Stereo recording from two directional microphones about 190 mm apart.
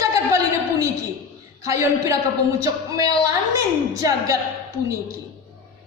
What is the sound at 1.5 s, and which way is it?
A man's voice, 15° right (ahead or behind).